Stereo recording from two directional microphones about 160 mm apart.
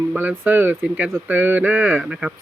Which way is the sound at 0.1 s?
10° right (ahead or behind).